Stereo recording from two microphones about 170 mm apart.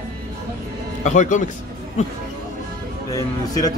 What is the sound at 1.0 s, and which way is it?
A man's voice, 45° left (ahead or behind).